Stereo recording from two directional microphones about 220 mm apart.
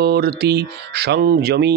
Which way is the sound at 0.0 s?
45° right (ahead or behind).